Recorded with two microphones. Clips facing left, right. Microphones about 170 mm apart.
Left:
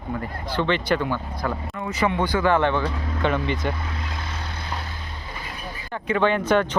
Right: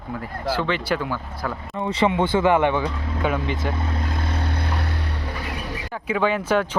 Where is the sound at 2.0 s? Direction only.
25° right (ahead or behind); by 3.7 s 5° right (ahead or behind).